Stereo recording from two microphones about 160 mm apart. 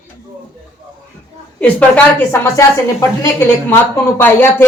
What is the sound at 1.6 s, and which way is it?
A woman's voice, 10° left (ahead or behind).